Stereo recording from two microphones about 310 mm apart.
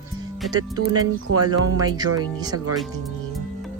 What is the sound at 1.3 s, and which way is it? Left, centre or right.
Speech, right.